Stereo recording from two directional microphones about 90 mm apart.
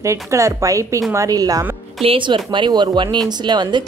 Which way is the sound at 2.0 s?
65° right (ahead or behind).